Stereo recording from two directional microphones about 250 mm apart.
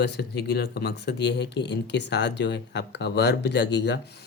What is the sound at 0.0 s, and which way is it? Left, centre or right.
Speech, left.